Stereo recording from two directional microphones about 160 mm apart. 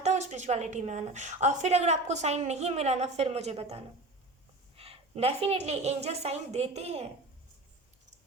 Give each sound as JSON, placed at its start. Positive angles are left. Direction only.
{"t": 0.0, "sound": "a woman's voice", "side_deg": -45}